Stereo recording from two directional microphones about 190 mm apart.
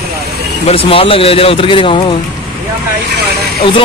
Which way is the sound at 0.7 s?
30° left (ahead or behind).